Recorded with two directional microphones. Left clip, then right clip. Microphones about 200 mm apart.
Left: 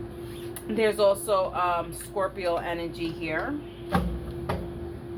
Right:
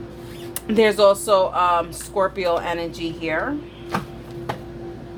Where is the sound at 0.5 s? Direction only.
45° right (ahead or behind).